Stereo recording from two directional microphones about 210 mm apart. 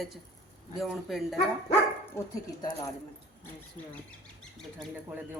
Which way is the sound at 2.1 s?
20° left (ahead or behind).